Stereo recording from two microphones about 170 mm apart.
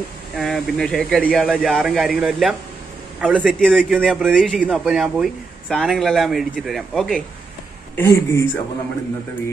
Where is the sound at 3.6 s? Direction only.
5° left (ahead or behind).